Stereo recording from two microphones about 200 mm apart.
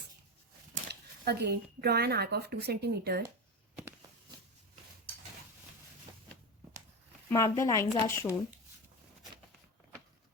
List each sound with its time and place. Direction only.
0.9 s speech: 55° right (ahead or behind)
7.3 s speech: 15° left (ahead or behind)